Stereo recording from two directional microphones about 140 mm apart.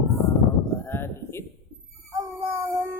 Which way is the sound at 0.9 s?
15° left (ahead or behind).